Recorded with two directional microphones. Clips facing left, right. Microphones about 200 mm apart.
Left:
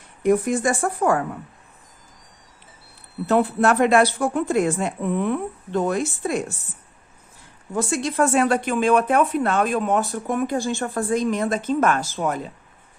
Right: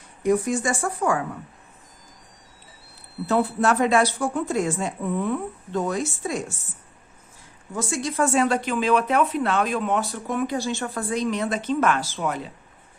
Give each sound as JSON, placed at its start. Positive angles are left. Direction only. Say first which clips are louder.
{"t": 0.2, "sound": "speech", "louder": "left 2 dB", "side_deg": 55}
{"t": 3.2, "sound": "speech", "louder": "left 3 dB", "side_deg": 60}
{"t": 7.8, "sound": "speech", "louder": "left 3 dB", "side_deg": 60}